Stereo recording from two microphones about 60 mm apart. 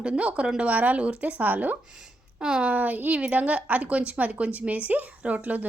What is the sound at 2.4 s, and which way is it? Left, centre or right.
Speech, centre.